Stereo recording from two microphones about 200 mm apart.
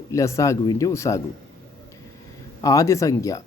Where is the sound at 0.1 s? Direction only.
15° left (ahead or behind).